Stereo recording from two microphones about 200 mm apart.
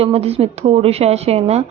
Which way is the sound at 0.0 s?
30° right (ahead or behind).